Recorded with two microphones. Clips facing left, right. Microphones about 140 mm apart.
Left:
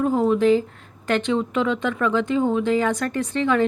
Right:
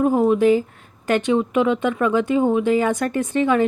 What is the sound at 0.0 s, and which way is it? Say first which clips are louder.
Speech: right 2 dB; 15° right (ahead or behind).